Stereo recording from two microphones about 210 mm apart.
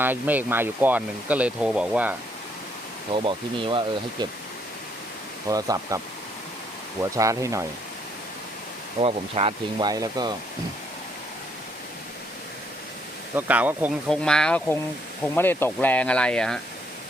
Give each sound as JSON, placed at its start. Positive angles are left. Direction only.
{"t": 0.0, "sound": "speech", "side_deg": -10}
{"t": 3.1, "sound": "speech", "side_deg": -25}
{"t": 5.5, "sound": "speech", "side_deg": -15}
{"t": 7.2, "sound": "speech", "side_deg": -15}
{"t": 9.0, "sound": "speech", "side_deg": -25}
{"t": 13.3, "sound": "speech", "side_deg": -10}
{"t": 14.3, "sound": "speech", "side_deg": 5}